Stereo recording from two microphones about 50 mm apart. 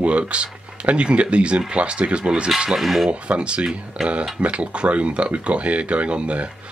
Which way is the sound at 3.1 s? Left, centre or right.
Right.